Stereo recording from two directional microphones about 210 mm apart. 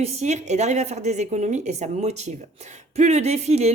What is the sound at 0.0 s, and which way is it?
A woman's voice, 30° right (ahead or behind).